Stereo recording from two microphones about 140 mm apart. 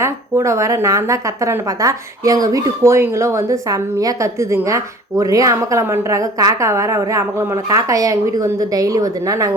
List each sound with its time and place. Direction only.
0.0 s a woman's voice: 20° right (ahead or behind)